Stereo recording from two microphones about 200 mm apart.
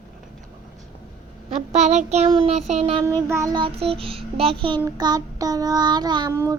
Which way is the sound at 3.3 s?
15° right (ahead or behind).